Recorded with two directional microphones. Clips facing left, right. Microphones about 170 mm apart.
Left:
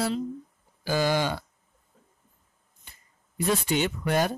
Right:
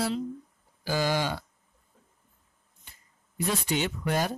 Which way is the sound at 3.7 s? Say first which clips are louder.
Left 3 dB; 55° left (ahead or behind).